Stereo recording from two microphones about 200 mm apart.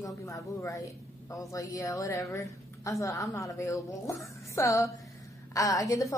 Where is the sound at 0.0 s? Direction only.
15° left (ahead or behind).